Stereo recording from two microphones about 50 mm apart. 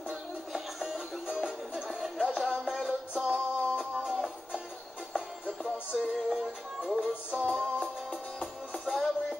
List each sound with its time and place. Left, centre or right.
0.1 s music: centre
1.9 s music: centre
5.9 s music: centre
6.1 s music: centre
7.8 s music: centre
8.7 s music: centre